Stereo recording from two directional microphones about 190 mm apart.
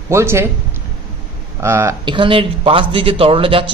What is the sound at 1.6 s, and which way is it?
Speech, 15° right (ahead or behind).